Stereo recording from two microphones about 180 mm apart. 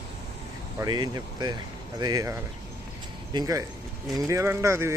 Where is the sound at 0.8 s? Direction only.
25° right (ahead or behind).